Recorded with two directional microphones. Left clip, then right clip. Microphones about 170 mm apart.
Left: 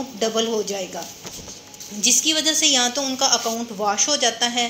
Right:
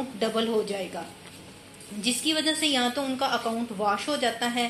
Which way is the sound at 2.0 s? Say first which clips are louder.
Left 7 dB; 35° left (ahead or behind).